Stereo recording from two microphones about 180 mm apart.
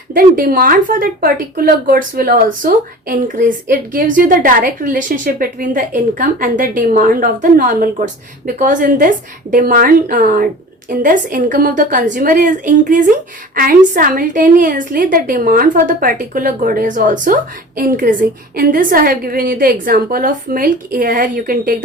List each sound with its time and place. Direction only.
0.1 s speech: 50° right (ahead or behind)